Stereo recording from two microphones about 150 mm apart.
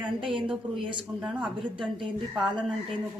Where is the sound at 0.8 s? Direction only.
35° right (ahead or behind).